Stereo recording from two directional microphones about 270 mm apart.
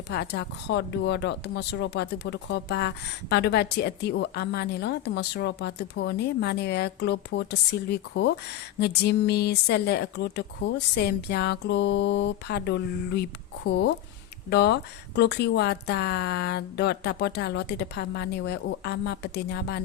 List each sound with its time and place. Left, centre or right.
0.1 s speech: left